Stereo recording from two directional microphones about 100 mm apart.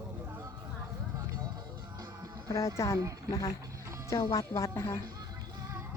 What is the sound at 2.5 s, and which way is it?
Speech, 30° left (ahead or behind).